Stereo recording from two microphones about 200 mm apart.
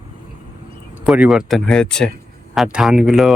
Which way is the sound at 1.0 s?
5° right (ahead or behind).